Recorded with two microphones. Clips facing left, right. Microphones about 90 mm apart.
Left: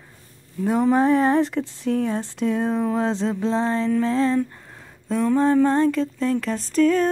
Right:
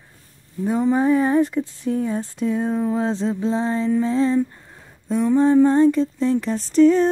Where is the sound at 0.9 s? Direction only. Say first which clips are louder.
Even; 10° right (ahead or behind).